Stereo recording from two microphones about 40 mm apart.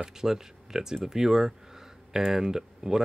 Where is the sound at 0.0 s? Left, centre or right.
Centre.